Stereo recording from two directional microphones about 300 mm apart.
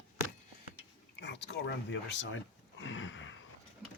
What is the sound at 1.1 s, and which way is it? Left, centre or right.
Speech, left.